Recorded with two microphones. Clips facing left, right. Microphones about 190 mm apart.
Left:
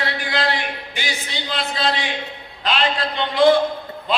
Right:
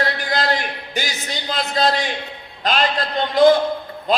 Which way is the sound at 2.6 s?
40° right (ahead or behind).